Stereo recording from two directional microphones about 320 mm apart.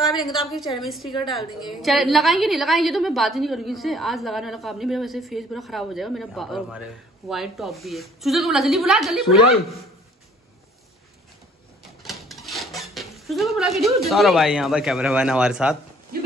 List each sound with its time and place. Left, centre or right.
0.0 s a woman's voice: centre
12.0 s dishes: centre
13.9 s a woman's voice: centre
16.1 s a sound: right